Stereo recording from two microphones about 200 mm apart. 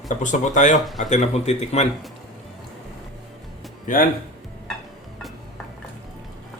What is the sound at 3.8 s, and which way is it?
Speech, 45° left (ahead or behind).